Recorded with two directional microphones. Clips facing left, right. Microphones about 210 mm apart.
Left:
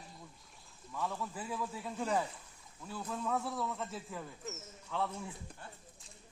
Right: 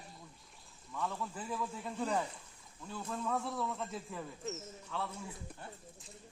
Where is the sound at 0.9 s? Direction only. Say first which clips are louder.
Even; 5° left (ahead or behind).